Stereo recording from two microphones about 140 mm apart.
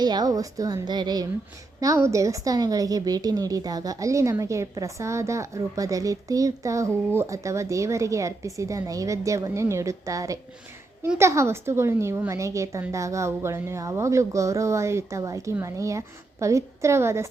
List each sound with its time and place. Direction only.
0.0 s a woman's voice: 30° right (ahead or behind)